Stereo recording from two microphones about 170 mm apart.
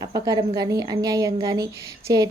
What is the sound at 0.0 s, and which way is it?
A woman's voice, 20° right (ahead or behind).